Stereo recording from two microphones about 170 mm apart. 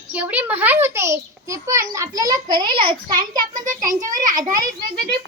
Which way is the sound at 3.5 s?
50° right (ahead or behind).